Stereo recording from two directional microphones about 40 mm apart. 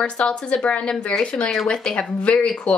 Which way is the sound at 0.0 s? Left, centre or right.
Left.